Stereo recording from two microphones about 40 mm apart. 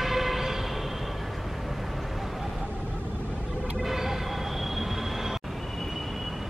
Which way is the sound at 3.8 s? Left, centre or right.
Centre.